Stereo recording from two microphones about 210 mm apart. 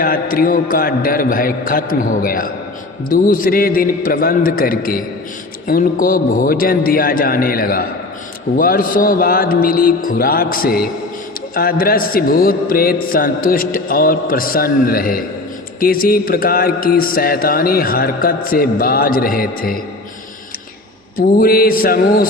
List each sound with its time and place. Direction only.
0.0 s a man's voice: 45° left (ahead or behind)
21.2 s a man's voice: 45° left (ahead or behind)